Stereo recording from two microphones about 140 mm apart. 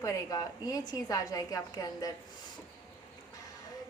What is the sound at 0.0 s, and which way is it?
A woman's voice, 25° left (ahead or behind).